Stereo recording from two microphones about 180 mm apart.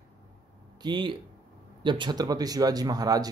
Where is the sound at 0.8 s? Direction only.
25° right (ahead or behind).